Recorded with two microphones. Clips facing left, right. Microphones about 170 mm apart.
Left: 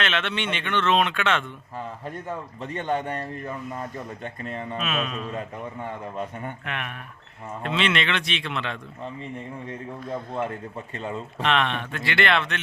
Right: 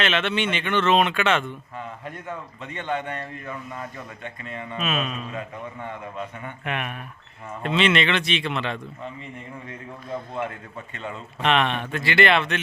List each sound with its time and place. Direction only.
0.0 s speech: 5° right (ahead or behind)
2.6 s a man's voice: 40° left (ahead or behind)
4.8 s speech: centre (ahead or behind)
6.7 s speech: 10° right (ahead or behind)
7.6 s speech: centre (ahead or behind)
10.9 s a man's voice: 35° left (ahead or behind)
11.4 s speech: 5° right (ahead or behind)